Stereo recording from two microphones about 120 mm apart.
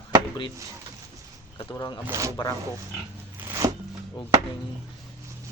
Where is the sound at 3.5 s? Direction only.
25° right (ahead or behind).